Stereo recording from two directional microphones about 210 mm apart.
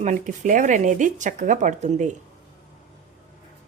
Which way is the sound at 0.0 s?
35° right (ahead or behind).